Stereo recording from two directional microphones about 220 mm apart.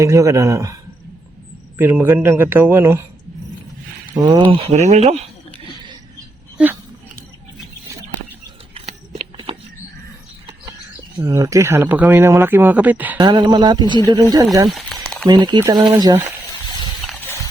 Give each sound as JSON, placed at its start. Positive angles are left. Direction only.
{"t": 0.0, "sound": "speech", "side_deg": -15}
{"t": 1.8, "sound": "speech", "side_deg": -10}
{"t": 4.1, "sound": "speech", "side_deg": -20}
{"t": 8.7, "sound": "a sound", "side_deg": -25}
{"t": 11.2, "sound": "speech", "side_deg": -15}
{"t": 13.1, "sound": "speech", "side_deg": -20}
{"t": 14.7, "sound": "a sound", "side_deg": 0}
{"t": 15.3, "sound": "speech", "side_deg": -20}